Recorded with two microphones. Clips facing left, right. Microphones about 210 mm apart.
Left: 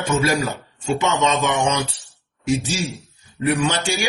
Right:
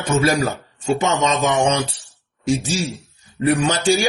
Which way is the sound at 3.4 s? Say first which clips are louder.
Right 2 dB; 35° right (ahead or behind).